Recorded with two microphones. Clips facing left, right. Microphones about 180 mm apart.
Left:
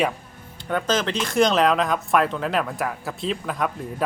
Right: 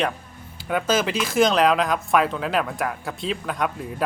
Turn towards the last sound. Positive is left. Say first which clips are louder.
# even
turn(degrees=0)  # may be behind; listen again after turning